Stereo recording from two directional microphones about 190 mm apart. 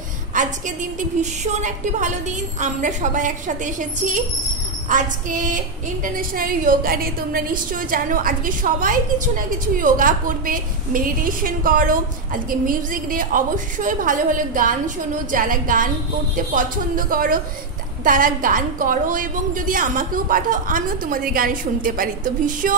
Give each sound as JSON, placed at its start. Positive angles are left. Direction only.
{"t": 0.3, "sound": "a woman's voice", "side_deg": -40}